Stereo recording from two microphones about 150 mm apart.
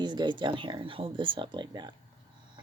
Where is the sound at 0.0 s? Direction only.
30° right (ahead or behind).